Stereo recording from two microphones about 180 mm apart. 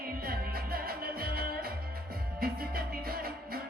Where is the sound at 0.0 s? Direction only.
55° right (ahead or behind).